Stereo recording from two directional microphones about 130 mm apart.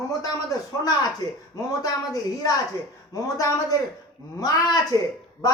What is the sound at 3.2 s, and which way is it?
A woman's voice, 25° left (ahead or behind).